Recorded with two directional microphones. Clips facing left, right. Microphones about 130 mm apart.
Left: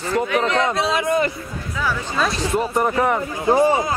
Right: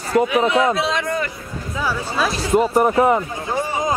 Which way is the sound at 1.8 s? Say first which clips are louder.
Even; 5° right (ahead or behind).